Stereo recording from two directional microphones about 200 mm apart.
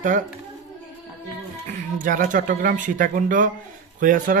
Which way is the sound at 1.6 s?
40° right (ahead or behind).